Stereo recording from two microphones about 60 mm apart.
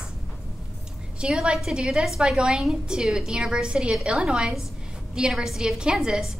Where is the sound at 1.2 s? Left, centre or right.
Centre.